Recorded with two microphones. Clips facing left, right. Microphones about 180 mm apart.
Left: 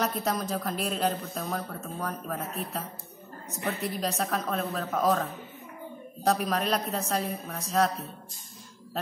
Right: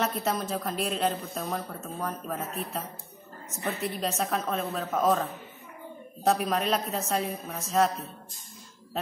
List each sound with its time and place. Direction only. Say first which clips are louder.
0.0 s a woman's voice: even; centre (ahead or behind)
3.5 s a woman's voice: even; centre (ahead or behind)